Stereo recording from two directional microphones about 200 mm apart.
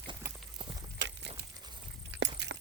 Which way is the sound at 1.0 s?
60° right (ahead or behind).